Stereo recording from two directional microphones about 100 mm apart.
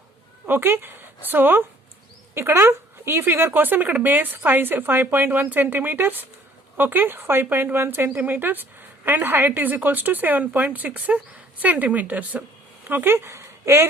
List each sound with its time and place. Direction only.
0.4 s a woman's voice: 20° right (ahead or behind)